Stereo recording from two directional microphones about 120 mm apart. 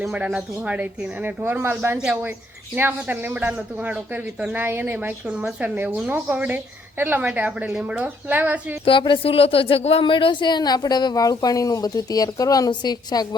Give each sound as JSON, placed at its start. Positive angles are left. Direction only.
{"t": 0.0, "sound": "speech", "side_deg": -5}
{"t": 8.8, "sound": "speech", "side_deg": 45}